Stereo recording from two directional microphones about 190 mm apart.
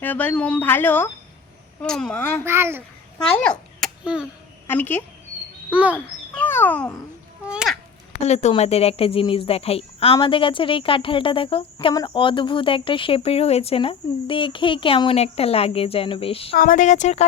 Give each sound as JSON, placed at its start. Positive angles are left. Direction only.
{"t": 0.0, "sound": "speech", "side_deg": 10}
{"t": 2.4, "sound": "a child's voice", "side_deg": -15}
{"t": 3.4, "sound": "a sound", "side_deg": 5}
{"t": 4.6, "sound": "speech", "side_deg": 10}
{"t": 5.7, "sound": "a child's voice", "side_deg": -10}
{"t": 6.3, "sound": "cat", "side_deg": 10}
{"t": 7.4, "sound": "a sound", "side_deg": -5}
{"t": 8.1, "sound": "a woman's voice", "side_deg": 35}
{"t": 16.6, "sound": "speech", "side_deg": 45}